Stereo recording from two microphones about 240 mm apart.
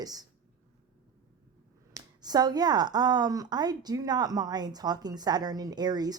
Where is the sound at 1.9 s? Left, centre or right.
Centre.